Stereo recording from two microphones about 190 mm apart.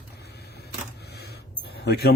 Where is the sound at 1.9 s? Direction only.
55° left (ahead or behind).